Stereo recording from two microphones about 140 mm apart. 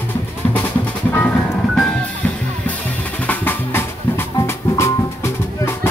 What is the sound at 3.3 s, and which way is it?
Music, 15° left (ahead or behind).